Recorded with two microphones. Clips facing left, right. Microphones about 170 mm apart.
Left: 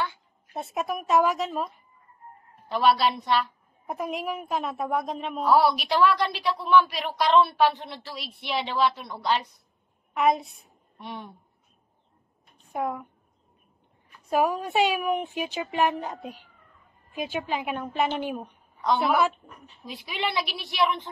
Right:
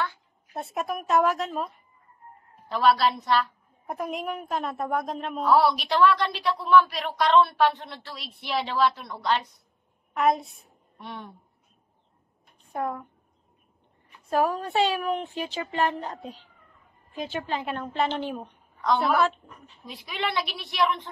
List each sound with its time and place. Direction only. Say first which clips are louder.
0.0 s a woman's voice: even; centre (ahead or behind)
12.7 s a woman's voice: left 1 dB; 10° left (ahead or behind)
14.3 s a woman's voice: left 1 dB; 15° left (ahead or behind)
18.8 s a woman's voice: even; centre (ahead or behind)